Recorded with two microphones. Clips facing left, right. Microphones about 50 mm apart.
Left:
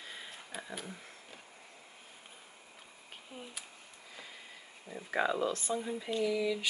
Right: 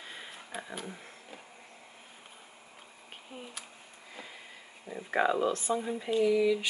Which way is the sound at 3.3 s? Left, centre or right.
Right.